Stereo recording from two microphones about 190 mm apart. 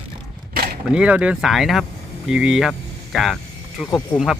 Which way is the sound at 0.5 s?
55° right (ahead or behind).